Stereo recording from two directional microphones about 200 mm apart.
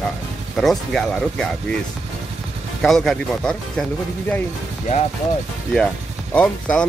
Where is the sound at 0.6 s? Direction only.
Centre (ahead or behind).